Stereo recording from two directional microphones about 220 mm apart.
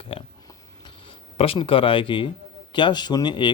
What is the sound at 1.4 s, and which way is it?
Speech, 25° left (ahead or behind).